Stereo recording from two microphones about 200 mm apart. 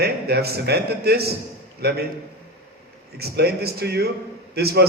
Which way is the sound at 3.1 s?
50° right (ahead or behind).